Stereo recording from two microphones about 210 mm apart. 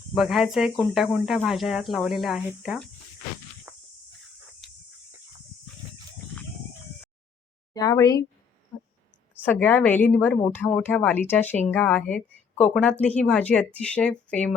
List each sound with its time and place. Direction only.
0.1 s speech: centre (ahead or behind)
3.7 s cricket: 5° right (ahead or behind)
7.7 s speech: 15° left (ahead or behind)
9.4 s speech: 10° left (ahead or behind)